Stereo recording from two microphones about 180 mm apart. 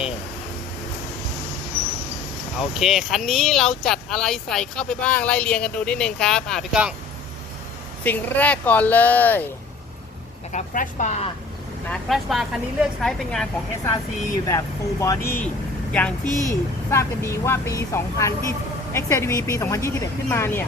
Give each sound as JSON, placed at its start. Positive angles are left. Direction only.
{"t": 2.6, "sound": "speech", "side_deg": 0}
{"t": 8.0, "sound": "speech", "side_deg": 10}
{"t": 10.5, "sound": "speech", "side_deg": 45}
{"t": 11.9, "sound": "speech", "side_deg": 0}
{"t": 14.4, "sound": "a woman's voice", "side_deg": 20}
{"t": 16.2, "sound": "a woman's voice", "side_deg": -20}
{"t": 16.9, "sound": "speech", "side_deg": 15}